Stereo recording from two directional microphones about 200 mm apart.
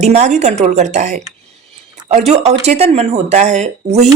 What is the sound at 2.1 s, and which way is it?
Speech, 35° right (ahead or behind).